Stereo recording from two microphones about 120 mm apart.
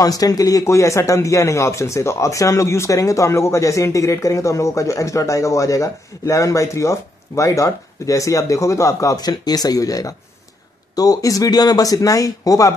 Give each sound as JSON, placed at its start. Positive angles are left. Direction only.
{"t": 0.0, "sound": "speech", "side_deg": 30}